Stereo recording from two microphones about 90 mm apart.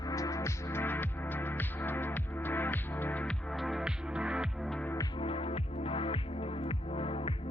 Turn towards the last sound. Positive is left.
turn(degrees=90)